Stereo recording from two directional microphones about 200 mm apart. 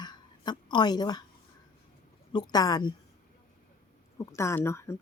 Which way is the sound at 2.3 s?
20° left (ahead or behind).